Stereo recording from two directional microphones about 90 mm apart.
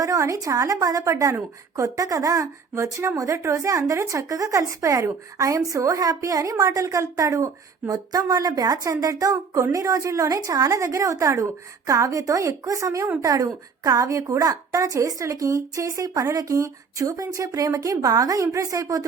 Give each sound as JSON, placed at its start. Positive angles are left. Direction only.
{"t": 0.0, "sound": "speech", "side_deg": -40}